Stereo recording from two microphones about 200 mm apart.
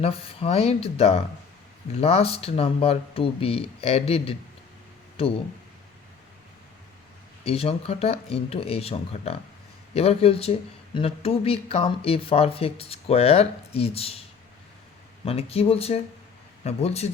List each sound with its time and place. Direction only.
0.0 s speech: 30° left (ahead or behind)
7.4 s speech: 30° left (ahead or behind)
15.2 s speech: 30° left (ahead or behind)